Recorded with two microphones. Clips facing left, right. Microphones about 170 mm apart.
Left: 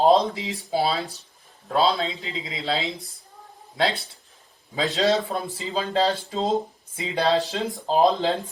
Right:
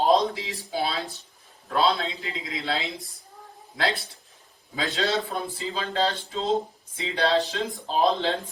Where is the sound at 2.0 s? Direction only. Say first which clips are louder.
Left 2 dB; 20° left (ahead or behind).